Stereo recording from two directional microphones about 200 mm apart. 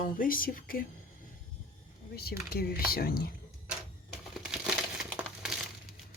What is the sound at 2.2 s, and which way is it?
Speech, 50° left (ahead or behind).